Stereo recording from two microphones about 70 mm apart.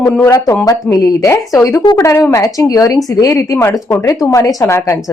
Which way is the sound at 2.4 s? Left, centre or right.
Left.